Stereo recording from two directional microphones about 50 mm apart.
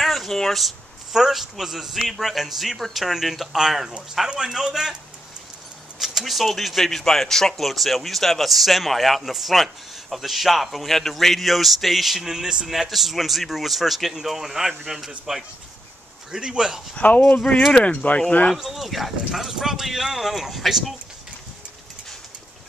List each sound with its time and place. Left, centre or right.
0.0 s a man's voice: centre
5.9 s a man's voice: centre
16.9 s speech: left
18.6 s speech: centre